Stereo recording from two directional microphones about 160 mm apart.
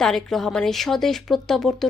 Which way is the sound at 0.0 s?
5° left (ahead or behind).